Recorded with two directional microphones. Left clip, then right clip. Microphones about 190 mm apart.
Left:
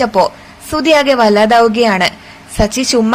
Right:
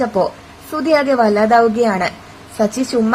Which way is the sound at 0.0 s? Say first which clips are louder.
Left 5 dB; 15° left (ahead or behind).